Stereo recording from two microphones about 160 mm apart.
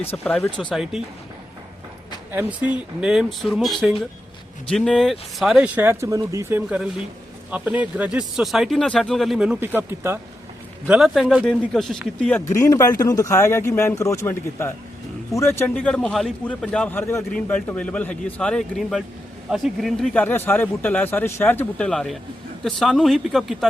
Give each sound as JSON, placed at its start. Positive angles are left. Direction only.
{"t": 0.1, "sound": "a man's voice", "side_deg": 5}
{"t": 2.3, "sound": "speech", "side_deg": -10}
{"t": 6.7, "sound": "speech", "side_deg": -5}
{"t": 12.5, "sound": "a man's voice", "side_deg": 20}
{"t": 20.2, "sound": "a man's voice", "side_deg": 15}